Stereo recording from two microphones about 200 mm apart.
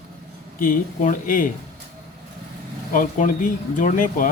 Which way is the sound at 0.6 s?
45° left (ahead or behind).